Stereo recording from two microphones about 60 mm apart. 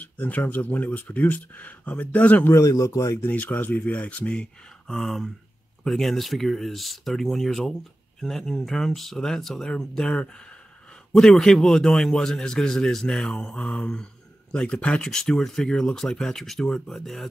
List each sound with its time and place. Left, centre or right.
0.0 s speech: left
2.5 s speech: left
3.2 s a man's voice: left
4.9 s a man's voice: centre